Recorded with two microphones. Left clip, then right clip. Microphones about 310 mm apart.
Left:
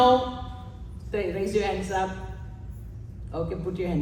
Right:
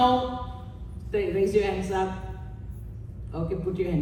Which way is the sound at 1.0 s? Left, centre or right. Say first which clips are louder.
Right 3 dB; left.